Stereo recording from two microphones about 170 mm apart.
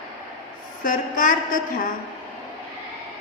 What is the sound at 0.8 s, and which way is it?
Speech, 50° left (ahead or behind).